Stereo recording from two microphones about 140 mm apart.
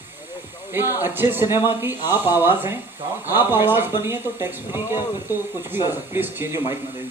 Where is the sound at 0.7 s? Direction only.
15° right (ahead or behind).